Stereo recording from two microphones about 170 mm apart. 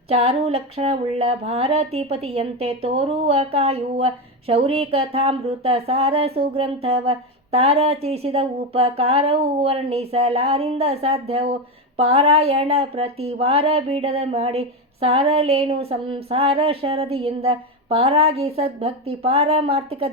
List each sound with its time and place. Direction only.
0.1 s speech: 35° right (ahead or behind)